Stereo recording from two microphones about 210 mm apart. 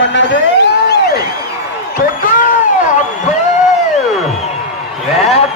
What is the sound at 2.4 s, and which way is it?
Cat, 40° left (ahead or behind).